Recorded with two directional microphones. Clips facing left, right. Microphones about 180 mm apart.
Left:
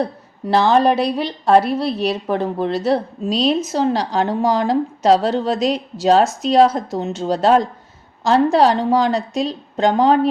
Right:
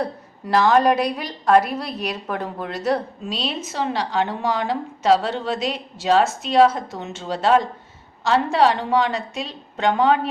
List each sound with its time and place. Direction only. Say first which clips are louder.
0.0 s a woman's voice: left 4 dB; 25° left (ahead or behind)
3.2 s a woman's voice: left 10 dB; 40° left (ahead or behind)